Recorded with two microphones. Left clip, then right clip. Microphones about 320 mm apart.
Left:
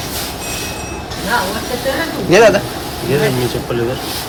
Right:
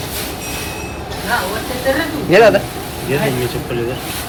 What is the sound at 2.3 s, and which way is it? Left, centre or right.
Speech, centre.